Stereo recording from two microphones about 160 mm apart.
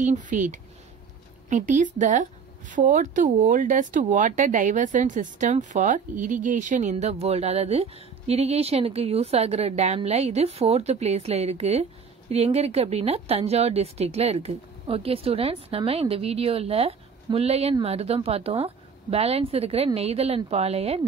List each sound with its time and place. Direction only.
0.0 s speech: 50° right (ahead or behind)